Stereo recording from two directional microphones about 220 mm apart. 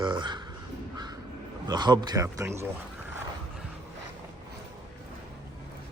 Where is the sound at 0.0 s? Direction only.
20° right (ahead or behind).